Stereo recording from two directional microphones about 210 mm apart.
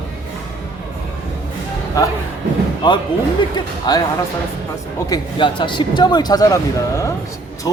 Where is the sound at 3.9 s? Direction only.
20° left (ahead or behind).